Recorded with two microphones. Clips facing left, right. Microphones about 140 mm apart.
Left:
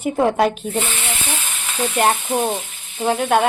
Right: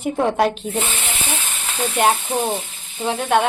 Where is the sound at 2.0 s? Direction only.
Centre (ahead or behind).